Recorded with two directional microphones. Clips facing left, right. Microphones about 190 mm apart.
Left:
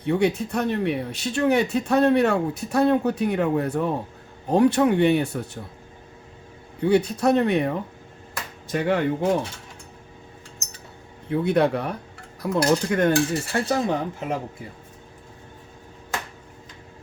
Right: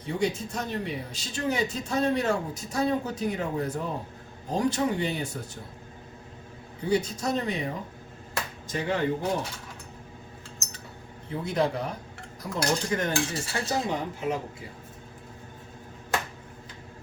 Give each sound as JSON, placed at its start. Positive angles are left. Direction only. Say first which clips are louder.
{"t": 0.0, "sound": "speech", "louder": "left 7 dB", "side_deg": 60}
{"t": 6.8, "sound": "speech", "louder": "left 7 dB", "side_deg": 60}
{"t": 11.3, "sound": "speech", "louder": "left 7 dB", "side_deg": 60}